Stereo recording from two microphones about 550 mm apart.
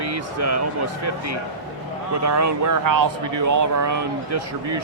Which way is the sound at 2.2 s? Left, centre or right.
Right.